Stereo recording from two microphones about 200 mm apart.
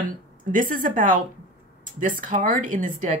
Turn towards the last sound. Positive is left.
turn(degrees=-40)  # may be behind; listen again after turning